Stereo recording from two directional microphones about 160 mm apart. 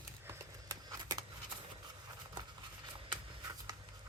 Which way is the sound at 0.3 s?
25° right (ahead or behind).